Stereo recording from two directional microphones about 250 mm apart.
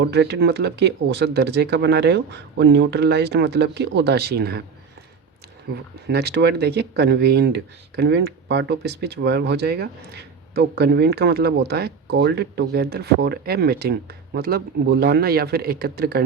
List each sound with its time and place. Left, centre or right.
0.0 s speech: right
6.1 s speech: right